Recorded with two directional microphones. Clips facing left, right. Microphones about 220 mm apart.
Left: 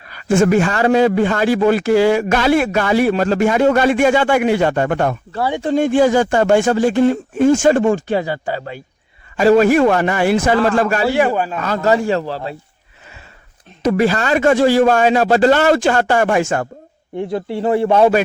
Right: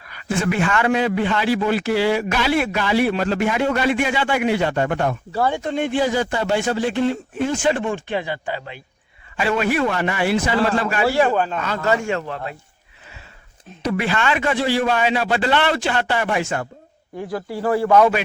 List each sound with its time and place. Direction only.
0.1 s a man's voice: 45° left (ahead or behind)
11.0 s a man's voice: 15° left (ahead or behind)
11.6 s a man's voice: 40° left (ahead or behind)
13.8 s a man's voice: 40° left (ahead or behind)
17.2 s a man's voice: 25° left (ahead or behind)